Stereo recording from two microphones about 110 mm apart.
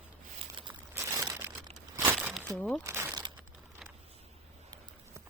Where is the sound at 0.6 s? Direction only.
50° right (ahead or behind).